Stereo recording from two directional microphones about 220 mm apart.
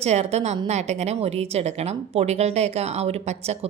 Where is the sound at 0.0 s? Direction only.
30° right (ahead or behind).